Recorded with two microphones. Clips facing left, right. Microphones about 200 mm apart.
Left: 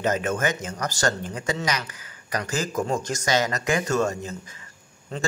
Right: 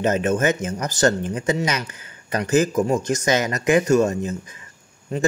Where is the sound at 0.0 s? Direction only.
20° right (ahead or behind).